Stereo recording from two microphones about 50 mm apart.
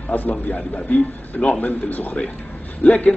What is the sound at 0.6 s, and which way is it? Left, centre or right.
Speech, centre.